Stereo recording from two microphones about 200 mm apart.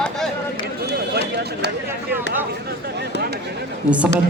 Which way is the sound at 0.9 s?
55° right (ahead or behind).